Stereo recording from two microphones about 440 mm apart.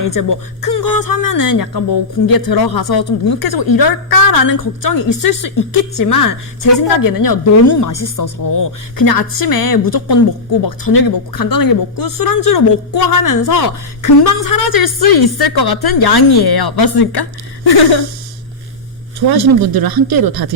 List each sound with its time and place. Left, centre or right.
0.0 s a woman's voice: left
19.3 s speech: right